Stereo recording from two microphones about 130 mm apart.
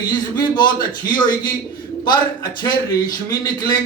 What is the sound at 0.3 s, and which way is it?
Speech, 35° left (ahead or behind).